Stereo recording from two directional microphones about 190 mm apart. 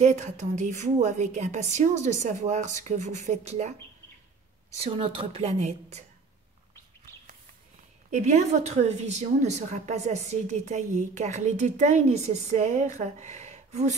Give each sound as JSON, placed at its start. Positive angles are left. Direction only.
{"t": 0.0, "sound": "a woman's voice", "side_deg": -35}
{"t": 4.7, "sound": "a woman's voice", "side_deg": -30}
{"t": 8.1, "sound": "a woman's voice", "side_deg": -40}